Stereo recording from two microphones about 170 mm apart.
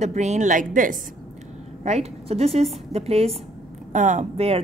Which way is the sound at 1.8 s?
40° right (ahead or behind).